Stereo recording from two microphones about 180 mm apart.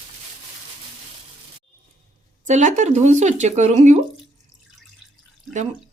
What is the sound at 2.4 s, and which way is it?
Speech, 40° right (ahead or behind).